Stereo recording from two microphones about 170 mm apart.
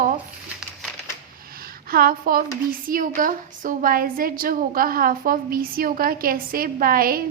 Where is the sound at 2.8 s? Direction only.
55° right (ahead or behind).